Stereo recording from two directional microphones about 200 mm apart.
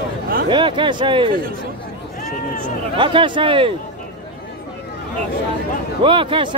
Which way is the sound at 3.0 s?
25° right (ahead or behind).